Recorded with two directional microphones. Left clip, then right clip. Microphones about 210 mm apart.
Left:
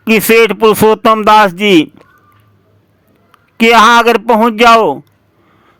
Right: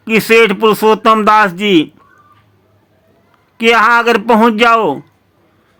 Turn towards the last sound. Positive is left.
turn(degrees=25)  # may be behind; listen again after turning